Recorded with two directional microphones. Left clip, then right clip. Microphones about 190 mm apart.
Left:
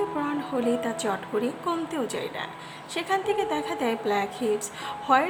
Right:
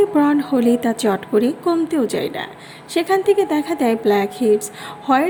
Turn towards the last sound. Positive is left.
turn(degrees=-20)  # may be behind; listen again after turning